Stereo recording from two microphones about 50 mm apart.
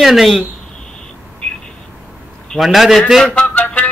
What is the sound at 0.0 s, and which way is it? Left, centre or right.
Speech, centre.